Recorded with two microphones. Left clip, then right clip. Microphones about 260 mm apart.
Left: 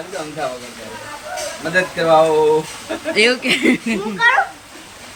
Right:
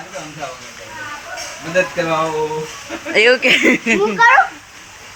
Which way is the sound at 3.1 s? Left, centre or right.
Centre.